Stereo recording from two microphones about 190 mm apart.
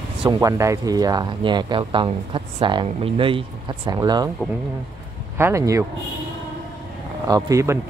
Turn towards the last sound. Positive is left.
turn(degrees=-15)  # may be behind; listen again after turning